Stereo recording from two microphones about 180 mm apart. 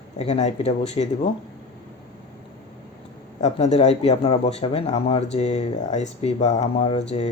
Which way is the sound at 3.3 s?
40° left (ahead or behind).